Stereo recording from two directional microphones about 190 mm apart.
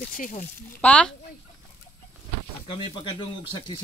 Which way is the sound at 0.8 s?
5° left (ahead or behind).